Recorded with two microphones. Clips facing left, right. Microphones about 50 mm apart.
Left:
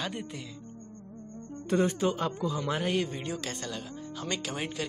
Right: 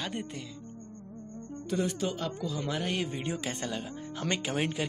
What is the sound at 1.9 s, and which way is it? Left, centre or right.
Speech, left.